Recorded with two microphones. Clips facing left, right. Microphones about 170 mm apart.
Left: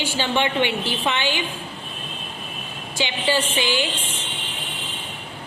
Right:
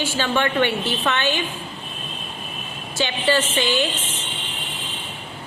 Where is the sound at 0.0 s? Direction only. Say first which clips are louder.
Right 1 dB; 15° left (ahead or behind).